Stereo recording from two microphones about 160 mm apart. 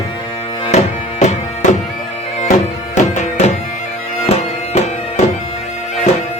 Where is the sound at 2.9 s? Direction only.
45° left (ahead or behind).